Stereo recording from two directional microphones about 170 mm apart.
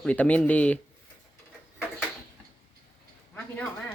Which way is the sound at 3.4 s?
10° left (ahead or behind).